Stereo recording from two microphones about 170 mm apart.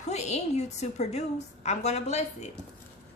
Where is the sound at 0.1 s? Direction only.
40° left (ahead or behind).